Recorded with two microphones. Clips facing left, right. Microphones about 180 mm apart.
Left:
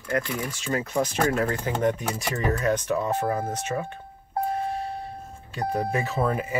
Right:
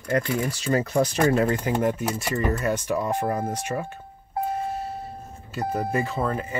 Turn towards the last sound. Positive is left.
turn(degrees=10)  # may be behind; listen again after turning